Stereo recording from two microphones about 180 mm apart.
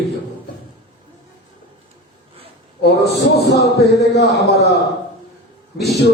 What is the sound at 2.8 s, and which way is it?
Speech, 65° left (ahead or behind).